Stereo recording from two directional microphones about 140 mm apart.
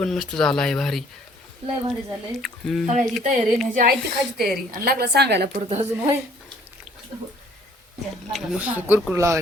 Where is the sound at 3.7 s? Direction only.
90° right.